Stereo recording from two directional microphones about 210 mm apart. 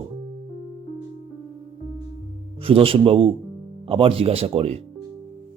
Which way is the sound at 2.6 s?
25° right (ahead or behind).